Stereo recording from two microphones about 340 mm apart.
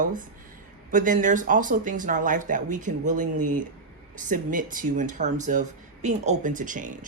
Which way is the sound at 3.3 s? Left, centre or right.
Right.